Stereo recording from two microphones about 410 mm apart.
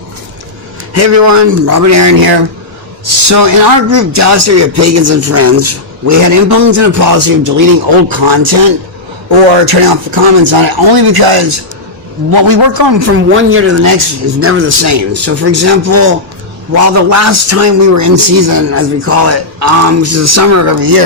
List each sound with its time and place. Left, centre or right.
0.9 s a man's voice: right
12.3 s a man's voice: right
18.7 s a man's voice: right